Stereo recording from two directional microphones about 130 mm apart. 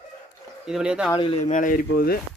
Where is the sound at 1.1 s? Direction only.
45° left (ahead or behind).